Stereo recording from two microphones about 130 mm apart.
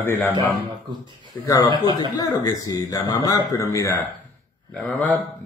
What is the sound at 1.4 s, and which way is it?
Speech, 25° left (ahead or behind).